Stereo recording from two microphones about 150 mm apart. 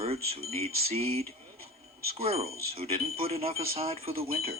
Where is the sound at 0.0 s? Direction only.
40° right (ahead or behind).